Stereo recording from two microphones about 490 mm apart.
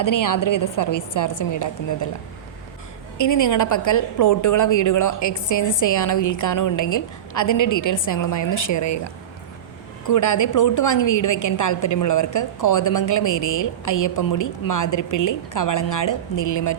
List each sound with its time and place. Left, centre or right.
0.0 s a woman's voice: left
3.2 s a woman's voice: left
10.1 s a woman's voice: left